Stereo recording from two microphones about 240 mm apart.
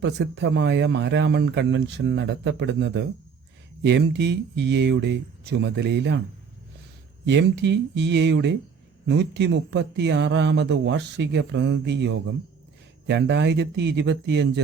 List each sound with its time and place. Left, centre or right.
0.0 s speech: right
7.3 s speech: right